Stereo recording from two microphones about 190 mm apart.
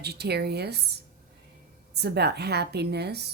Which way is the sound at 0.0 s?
60° right (ahead or behind).